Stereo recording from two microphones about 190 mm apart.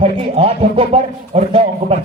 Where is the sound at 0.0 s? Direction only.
30° right (ahead or behind).